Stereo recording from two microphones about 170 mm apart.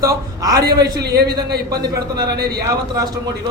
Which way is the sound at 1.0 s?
70° right (ahead or behind).